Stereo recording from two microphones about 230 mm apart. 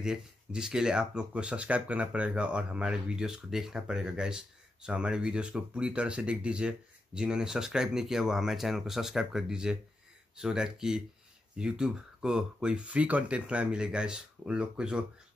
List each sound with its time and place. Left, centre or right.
0.0 s speech: centre